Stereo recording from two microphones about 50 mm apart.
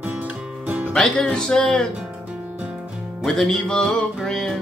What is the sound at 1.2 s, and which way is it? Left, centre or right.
Speech, centre.